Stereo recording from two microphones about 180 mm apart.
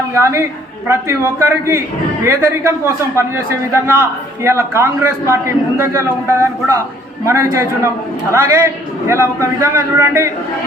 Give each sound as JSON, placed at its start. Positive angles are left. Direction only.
{"t": 0.1, "sound": "a man's voice", "side_deg": -15}